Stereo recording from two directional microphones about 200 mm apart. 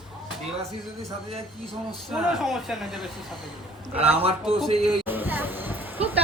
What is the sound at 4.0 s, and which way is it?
Speech, 30° right (ahead or behind).